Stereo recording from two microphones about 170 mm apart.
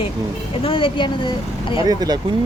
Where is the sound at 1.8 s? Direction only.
25° right (ahead or behind).